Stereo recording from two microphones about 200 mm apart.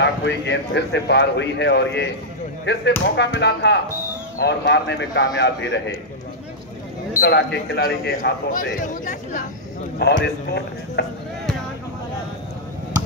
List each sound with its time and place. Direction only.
0.0 s a man's voice: 60° left (ahead or behind)
7.2 s speech: 55° left (ahead or behind); by 9.4 s 40° left (ahead or behind)
9.9 s a man's voice: 55° left (ahead or behind)